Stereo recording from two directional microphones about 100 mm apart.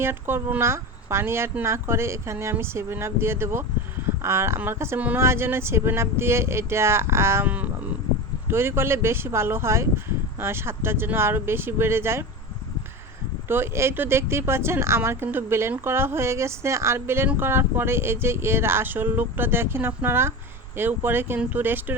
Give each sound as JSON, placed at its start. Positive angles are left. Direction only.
{"t": 0.0, "sound": "speech", "side_deg": -25}
{"t": 4.9, "sound": "speech", "side_deg": -15}
{"t": 5.2, "sound": "speech", "side_deg": -25}
{"t": 7.4, "sound": "speech", "side_deg": -15}
{"t": 13.5, "sound": "speech", "side_deg": -25}